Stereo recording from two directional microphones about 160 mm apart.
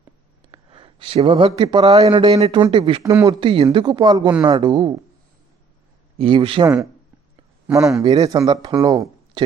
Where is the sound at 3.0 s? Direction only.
20° right (ahead or behind).